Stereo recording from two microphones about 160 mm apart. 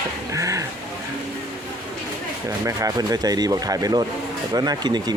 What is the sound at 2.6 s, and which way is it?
Speech, 20° right (ahead or behind).